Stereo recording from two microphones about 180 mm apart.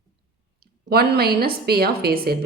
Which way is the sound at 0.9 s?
60° right (ahead or behind).